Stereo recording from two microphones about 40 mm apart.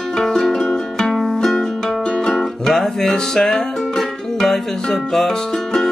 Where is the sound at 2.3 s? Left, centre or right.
Centre.